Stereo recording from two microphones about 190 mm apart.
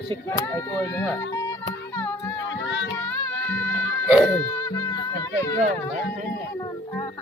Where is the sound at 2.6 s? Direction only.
70° left (ahead or behind).